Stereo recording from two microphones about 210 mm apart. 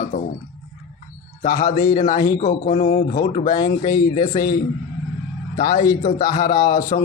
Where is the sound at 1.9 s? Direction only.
40° left (ahead or behind).